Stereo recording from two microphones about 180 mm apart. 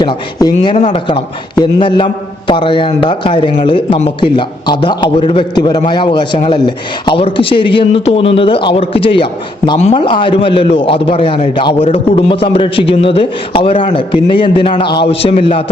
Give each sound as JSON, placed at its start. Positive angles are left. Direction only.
{"t": 0.0, "sound": "speech", "side_deg": 25}